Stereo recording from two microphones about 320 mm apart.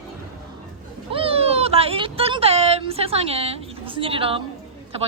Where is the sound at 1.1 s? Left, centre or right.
Centre.